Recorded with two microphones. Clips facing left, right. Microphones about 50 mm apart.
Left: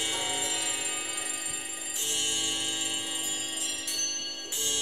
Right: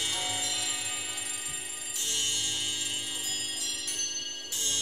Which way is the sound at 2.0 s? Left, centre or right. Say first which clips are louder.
Left 1 dB; left.